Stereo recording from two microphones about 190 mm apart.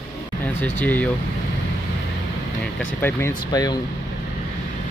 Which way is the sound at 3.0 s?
10° left (ahead or behind).